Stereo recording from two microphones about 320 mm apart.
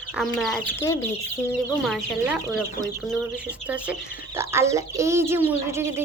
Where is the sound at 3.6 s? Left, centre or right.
Centre.